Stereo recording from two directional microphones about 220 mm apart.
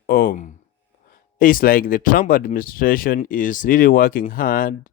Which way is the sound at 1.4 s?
40° left (ahead or behind).